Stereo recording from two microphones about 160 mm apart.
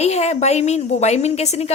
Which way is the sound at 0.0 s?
45° left (ahead or behind).